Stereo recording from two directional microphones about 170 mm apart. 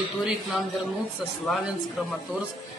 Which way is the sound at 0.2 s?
Centre (ahead or behind).